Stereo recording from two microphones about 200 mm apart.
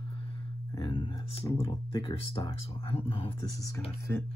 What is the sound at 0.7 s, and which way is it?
Speech, 25° left (ahead or behind).